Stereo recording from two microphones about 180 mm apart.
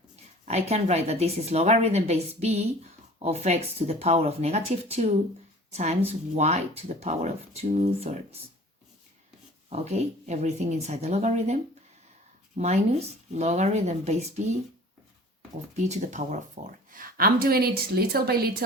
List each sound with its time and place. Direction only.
0.4 s speech: 35° right (ahead or behind)
9.6 s speech: 35° right (ahead or behind)
15.7 s speech: 40° right (ahead or behind)
16.9 s a woman's voice: 50° right (ahead or behind)